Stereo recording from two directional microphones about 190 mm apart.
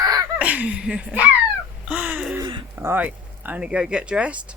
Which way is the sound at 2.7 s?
10° right (ahead or behind).